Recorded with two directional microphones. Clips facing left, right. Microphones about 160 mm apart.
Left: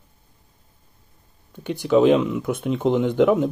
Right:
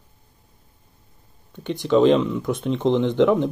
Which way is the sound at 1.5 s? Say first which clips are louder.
Left 1 dB; 5° left (ahead or behind).